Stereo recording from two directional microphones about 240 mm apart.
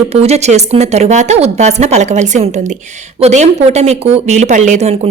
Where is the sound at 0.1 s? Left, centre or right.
Right.